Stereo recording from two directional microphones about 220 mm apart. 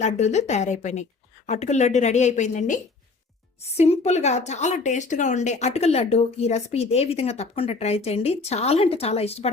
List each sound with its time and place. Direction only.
0.0 s a woman's voice: 30° left (ahead or behind)